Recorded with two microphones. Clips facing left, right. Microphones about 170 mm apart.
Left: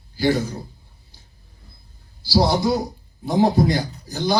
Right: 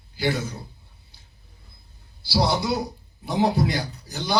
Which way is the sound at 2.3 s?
40° left (ahead or behind).